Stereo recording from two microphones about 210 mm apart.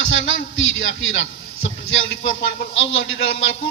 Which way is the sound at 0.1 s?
65° left (ahead or behind).